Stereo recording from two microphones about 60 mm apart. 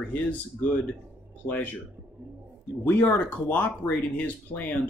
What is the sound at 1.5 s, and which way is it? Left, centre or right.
Speech, left.